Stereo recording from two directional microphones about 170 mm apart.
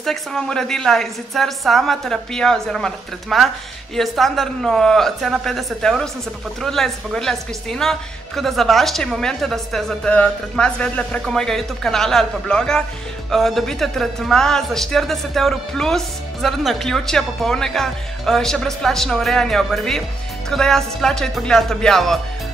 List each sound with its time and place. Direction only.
0.0 s speech: centre (ahead or behind)